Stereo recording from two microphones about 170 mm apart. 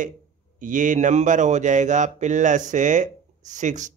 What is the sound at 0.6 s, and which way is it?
Speech, 50° right (ahead or behind).